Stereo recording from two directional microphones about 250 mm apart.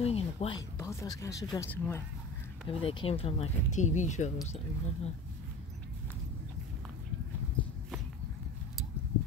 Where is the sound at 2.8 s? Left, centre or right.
Left.